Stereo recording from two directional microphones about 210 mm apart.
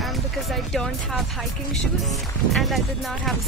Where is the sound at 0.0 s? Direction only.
Centre (ahead or behind).